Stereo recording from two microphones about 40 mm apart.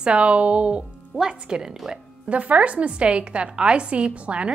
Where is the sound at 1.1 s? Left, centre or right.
Centre.